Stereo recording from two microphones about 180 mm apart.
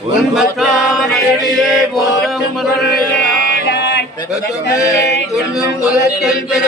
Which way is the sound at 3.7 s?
65° left (ahead or behind).